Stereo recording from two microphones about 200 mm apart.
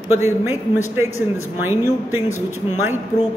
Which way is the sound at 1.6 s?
10° right (ahead or behind).